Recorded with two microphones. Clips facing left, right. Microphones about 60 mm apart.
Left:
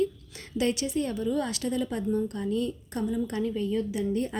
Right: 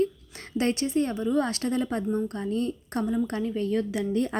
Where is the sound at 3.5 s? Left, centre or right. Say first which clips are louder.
Right 2 dB; right.